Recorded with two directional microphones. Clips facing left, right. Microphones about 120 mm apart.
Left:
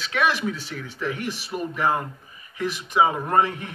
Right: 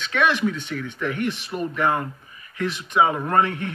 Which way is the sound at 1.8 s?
30° left (ahead or behind).